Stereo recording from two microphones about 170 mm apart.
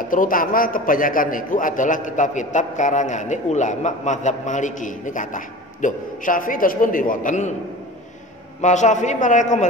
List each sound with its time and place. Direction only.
0.1 s a man's voice: 50° left (ahead or behind)
8.5 s a man's voice: 45° left (ahead or behind)